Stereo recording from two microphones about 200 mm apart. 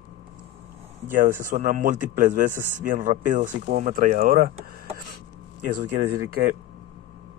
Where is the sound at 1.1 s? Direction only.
40° right (ahead or behind).